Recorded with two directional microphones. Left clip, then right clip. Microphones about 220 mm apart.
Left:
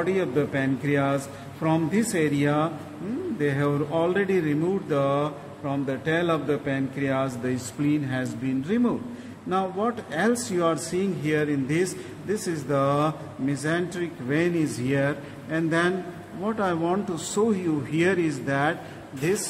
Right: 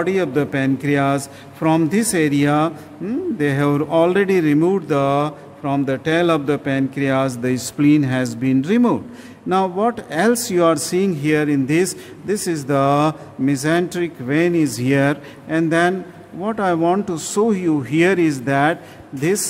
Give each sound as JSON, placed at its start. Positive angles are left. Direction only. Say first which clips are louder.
{"t": 0.0, "sound": "speech", "louder": "right 6 dB", "side_deg": -55}